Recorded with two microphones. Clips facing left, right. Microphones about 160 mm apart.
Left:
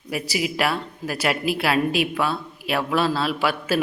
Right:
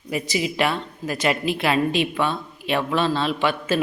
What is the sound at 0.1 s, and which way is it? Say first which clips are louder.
Speech: right 1 dB; 5° left (ahead or behind).